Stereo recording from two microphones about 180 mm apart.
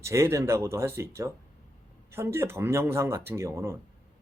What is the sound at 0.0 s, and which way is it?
Speech, 15° right (ahead or behind).